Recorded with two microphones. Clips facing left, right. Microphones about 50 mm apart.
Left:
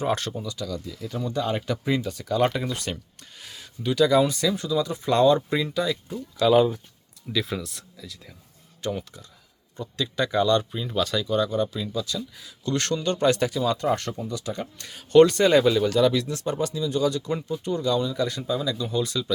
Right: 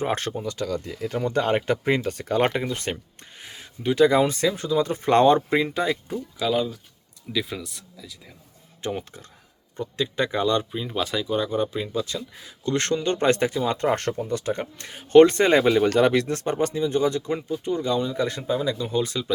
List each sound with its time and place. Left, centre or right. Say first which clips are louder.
0.0 s speech: right 1 dB; right
7.3 s speech: left 1 dB; centre
8.8 s speech: even; right
17.3 s speech: right 1 dB; right